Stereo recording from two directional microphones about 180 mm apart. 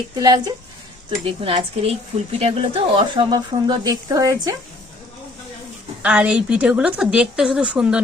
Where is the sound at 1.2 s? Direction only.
30° right (ahead or behind).